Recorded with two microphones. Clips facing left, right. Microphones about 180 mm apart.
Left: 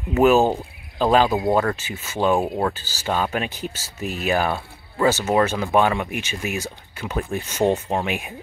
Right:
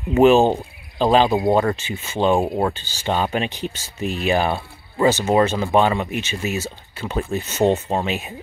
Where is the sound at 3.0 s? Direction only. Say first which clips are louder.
Right 2 dB; 20° right (ahead or behind).